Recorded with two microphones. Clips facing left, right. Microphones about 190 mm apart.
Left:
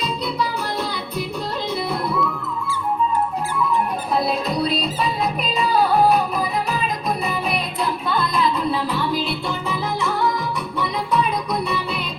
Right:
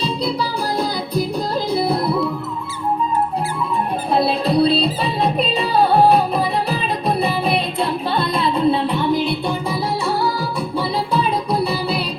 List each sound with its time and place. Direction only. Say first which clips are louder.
1.7 s music: right 6 dB; 35° right (ahead or behind)
4.1 s music: right 6 dB; 30° right (ahead or behind)